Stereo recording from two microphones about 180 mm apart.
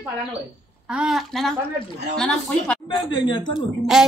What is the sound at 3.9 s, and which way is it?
Speech, centre (ahead or behind).